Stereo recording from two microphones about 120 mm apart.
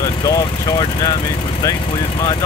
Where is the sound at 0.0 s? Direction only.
30° left (ahead or behind).